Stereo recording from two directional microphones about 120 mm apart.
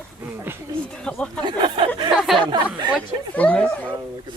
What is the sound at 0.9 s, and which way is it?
Speech, 5° left (ahead or behind).